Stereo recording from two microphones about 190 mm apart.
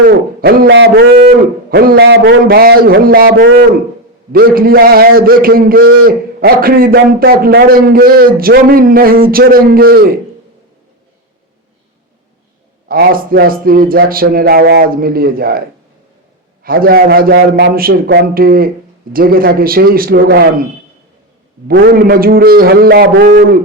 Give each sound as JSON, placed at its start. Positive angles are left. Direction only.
{"t": 0.1, "sound": "a man's voice", "side_deg": -55}
{"t": 1.2, "sound": "a man's voice", "side_deg": -50}
{"t": 12.9, "sound": "a man's voice", "side_deg": -50}
{"t": 16.6, "sound": "a man's voice", "side_deg": -50}
{"t": 21.7, "sound": "a man's voice", "side_deg": -50}